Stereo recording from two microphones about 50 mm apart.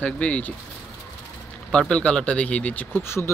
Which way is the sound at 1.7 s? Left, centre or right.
Centre.